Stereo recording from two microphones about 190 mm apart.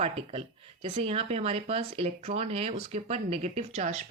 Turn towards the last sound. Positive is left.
turn(degrees=-35)  # may be behind; listen again after turning